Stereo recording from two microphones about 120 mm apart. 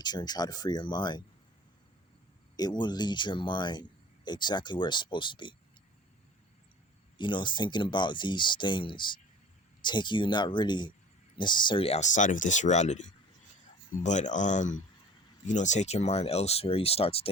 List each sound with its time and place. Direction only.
0.0 s speech: 35° left (ahead or behind)
2.6 s speech: 35° left (ahead or behind)
7.2 s speech: 40° left (ahead or behind)
11.9 s speech: 80° left
14.0 s speech: 90° left; by 17.2 s 55° left (ahead or behind)